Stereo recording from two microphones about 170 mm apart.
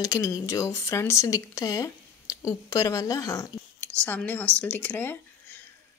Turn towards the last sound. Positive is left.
turn(degrees=10)  # may be behind; listen again after turning